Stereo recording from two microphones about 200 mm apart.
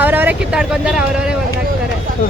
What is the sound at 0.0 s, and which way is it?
Vehicle, 10° right (ahead or behind).